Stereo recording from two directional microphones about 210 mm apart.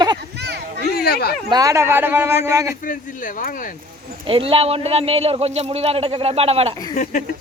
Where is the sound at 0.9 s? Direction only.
45° left (ahead or behind).